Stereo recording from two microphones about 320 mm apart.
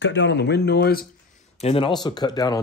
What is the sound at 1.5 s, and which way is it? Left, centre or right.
Speech, centre.